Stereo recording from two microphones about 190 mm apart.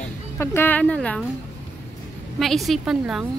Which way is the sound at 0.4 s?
10° left (ahead or behind).